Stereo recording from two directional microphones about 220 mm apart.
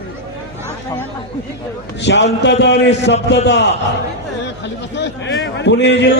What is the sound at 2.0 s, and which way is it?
A man's voice, 55° left (ahead or behind).